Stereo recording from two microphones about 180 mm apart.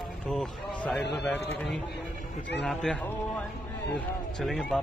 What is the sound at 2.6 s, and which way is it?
A man's voice, 5° left (ahead or behind).